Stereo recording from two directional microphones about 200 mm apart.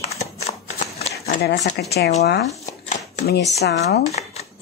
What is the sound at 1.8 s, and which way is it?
Speech, 55° left (ahead or behind).